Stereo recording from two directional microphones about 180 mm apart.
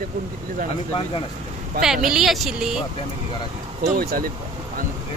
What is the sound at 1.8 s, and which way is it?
A woman's voice, 5° right (ahead or behind).